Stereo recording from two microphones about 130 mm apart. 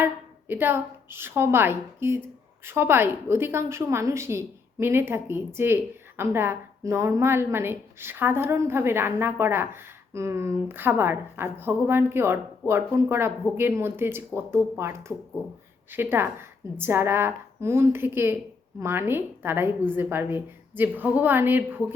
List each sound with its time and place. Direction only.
0.0 s a woman's voice: 15° right (ahead or behind)